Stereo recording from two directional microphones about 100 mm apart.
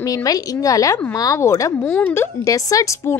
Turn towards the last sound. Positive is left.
turn(degrees=35)  # may be behind; listen again after turning